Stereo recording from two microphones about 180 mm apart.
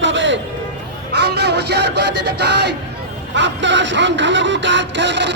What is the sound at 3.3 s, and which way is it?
Speech, 85° right.